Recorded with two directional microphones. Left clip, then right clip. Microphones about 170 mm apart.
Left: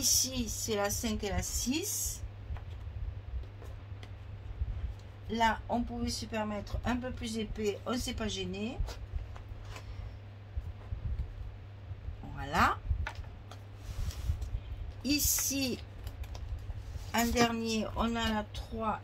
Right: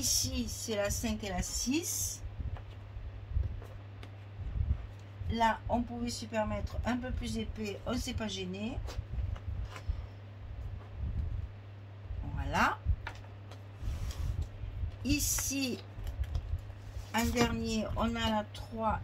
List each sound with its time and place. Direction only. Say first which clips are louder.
0.0 s speech: left 3 dB; 50° left (ahead or behind)
5.3 s speech: even; 45° left (ahead or behind)
12.4 s speech: left 2 dB; 50° left (ahead or behind)
15.0 s speech: left 2 dB; 50° left (ahead or behind)
17.1 s speech: left 2 dB; 45° left (ahead or behind)